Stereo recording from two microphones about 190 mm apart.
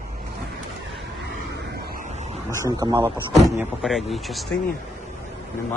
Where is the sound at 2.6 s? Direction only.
20° right (ahead or behind).